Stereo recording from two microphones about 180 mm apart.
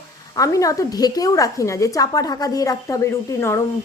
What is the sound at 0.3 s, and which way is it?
A woman's voice, 20° left (ahead or behind).